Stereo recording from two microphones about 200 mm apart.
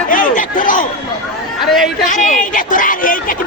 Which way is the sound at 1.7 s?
Centre (ahead or behind).